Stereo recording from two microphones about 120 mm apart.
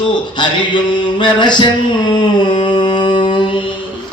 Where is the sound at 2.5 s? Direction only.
40° left (ahead or behind).